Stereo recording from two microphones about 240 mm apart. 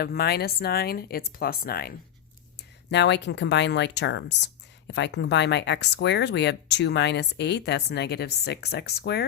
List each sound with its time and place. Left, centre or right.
0.0 s speech: left